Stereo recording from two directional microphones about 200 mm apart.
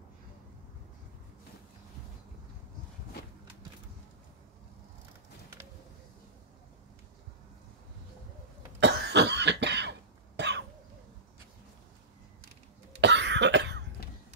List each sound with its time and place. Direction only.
8.7 s cough: 60° right (ahead or behind)
13.0 s cough: 60° right (ahead or behind)